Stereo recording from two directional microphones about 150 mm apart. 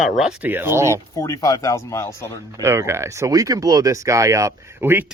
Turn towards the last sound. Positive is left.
turn(degrees=-15)  # may be behind; listen again after turning